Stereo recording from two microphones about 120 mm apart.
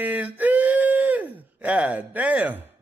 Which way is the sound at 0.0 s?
15° right (ahead or behind).